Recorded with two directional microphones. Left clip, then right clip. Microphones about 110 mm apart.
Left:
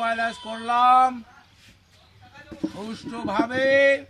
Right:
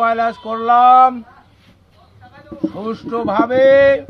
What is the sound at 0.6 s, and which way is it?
Speech, 5° left (ahead or behind).